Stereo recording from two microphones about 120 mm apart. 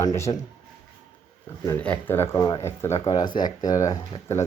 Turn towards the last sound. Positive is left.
turn(degrees=25)  # may be behind; listen again after turning